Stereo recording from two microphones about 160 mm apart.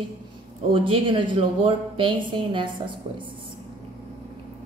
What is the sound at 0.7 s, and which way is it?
A woman's voice, 35° right (ahead or behind).